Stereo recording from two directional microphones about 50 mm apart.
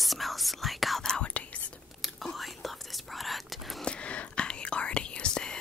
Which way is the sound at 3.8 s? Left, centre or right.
Left.